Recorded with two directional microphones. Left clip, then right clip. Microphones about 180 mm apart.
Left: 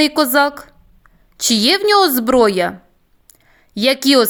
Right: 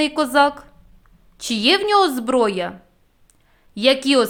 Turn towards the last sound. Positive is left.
turn(degrees=35)  # may be behind; listen again after turning